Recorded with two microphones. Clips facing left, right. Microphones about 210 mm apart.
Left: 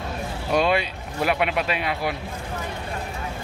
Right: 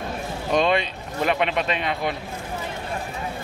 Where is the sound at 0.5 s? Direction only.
5° left (ahead or behind).